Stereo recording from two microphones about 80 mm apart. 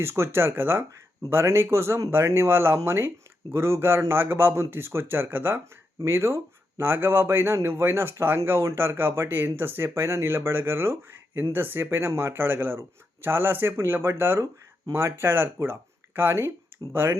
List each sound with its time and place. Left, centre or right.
0.0 s speech: right